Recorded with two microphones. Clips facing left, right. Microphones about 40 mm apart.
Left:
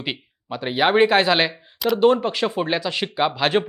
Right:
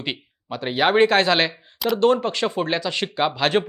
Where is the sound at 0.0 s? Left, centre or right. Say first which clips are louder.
Even; centre.